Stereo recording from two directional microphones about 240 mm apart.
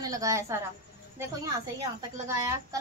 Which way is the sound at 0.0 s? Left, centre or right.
Centre.